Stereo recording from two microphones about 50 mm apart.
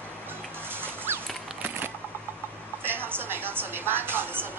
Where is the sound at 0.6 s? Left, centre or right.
Right.